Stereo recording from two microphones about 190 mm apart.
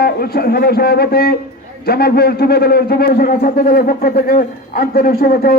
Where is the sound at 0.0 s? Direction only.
55° left (ahead or behind).